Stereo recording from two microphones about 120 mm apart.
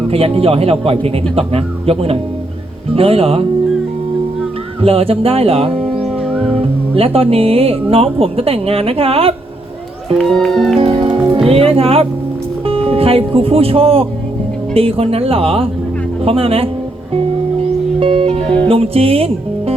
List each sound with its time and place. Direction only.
0.1 s speech: 55° right (ahead or behind)
4.8 s speech: 55° right (ahead or behind)
5.7 s music: centre (ahead or behind)
6.9 s speech: 55° right (ahead or behind)
10.2 s speech: 5° left (ahead or behind)
10.8 s music: 55° right (ahead or behind)
12.6 s speech: 50° right (ahead or behind)
17.2 s music: 55° right (ahead or behind)
18.4 s music: 10° left (ahead or behind)
18.7 s speech: 55° right (ahead or behind)